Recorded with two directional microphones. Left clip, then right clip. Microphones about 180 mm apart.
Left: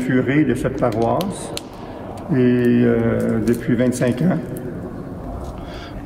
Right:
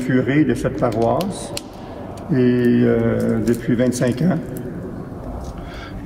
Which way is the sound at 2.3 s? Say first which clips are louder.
Even; 5° left (ahead or behind).